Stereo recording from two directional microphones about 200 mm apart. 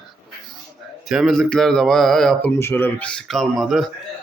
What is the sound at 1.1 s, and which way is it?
A man's voice, centre (ahead or behind).